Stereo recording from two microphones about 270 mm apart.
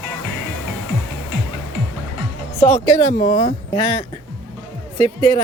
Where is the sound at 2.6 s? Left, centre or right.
Centre.